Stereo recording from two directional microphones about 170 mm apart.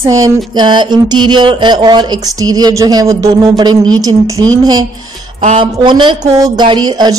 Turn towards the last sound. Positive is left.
turn(degrees=-25)  # may be behind; listen again after turning